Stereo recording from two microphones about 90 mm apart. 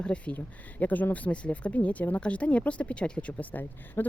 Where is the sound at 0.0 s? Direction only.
15° left (ahead or behind).